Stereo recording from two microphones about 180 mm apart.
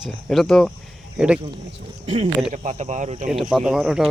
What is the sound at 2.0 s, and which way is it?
Speech, 35° right (ahead or behind).